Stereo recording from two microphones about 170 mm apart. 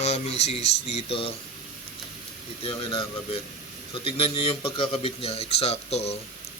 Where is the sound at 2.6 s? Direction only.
30° left (ahead or behind).